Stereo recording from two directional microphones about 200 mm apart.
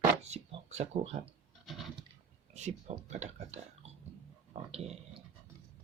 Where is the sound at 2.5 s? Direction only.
35° right (ahead or behind).